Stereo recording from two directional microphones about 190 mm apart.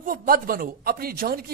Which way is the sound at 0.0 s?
45° right (ahead or behind).